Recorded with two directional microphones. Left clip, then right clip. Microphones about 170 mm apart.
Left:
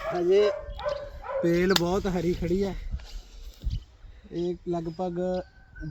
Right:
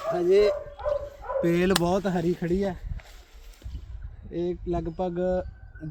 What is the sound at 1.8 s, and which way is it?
Speech, 50° right (ahead or behind).